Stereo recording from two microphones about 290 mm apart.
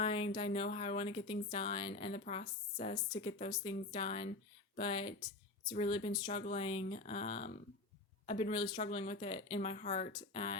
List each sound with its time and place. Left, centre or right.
0.0 s speech: centre
10.1 s speech: centre